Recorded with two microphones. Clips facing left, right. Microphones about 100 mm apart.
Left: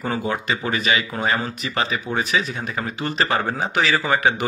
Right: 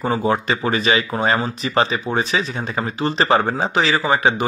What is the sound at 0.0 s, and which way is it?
Speech, 30° right (ahead or behind).